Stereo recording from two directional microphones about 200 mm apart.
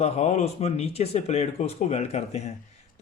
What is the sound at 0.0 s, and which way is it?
Speech, 35° left (ahead or behind).